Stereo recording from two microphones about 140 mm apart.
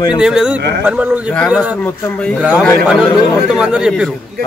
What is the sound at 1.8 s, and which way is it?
Speech, 10° left (ahead or behind).